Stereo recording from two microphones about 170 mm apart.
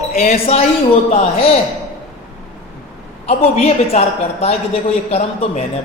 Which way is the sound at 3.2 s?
35° left (ahead or behind).